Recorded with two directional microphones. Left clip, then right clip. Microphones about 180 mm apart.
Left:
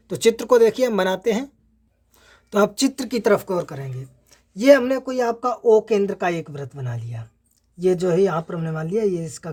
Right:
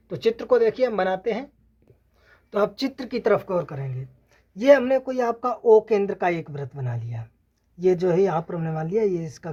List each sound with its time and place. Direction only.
0.1 s speech: 70° left (ahead or behind)
2.2 s speech: 70° left (ahead or behind); by 9.5 s 25° left (ahead or behind)